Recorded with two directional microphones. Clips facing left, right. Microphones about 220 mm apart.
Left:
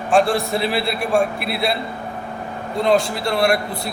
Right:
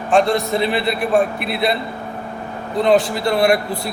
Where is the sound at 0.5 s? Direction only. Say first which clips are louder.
Right 2 dB; centre (ahead or behind).